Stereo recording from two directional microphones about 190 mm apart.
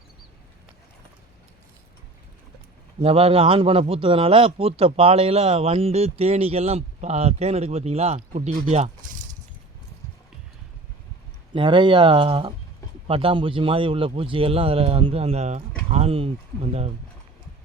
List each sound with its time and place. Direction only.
3.0 s a man's voice: 30° right (ahead or behind)
11.5 s speech: 25° right (ahead or behind)